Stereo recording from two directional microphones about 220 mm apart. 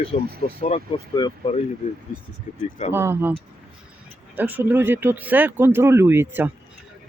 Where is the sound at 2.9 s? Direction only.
10° right (ahead or behind).